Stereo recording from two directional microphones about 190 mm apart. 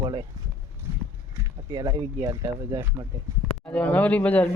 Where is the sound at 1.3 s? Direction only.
20° right (ahead or behind).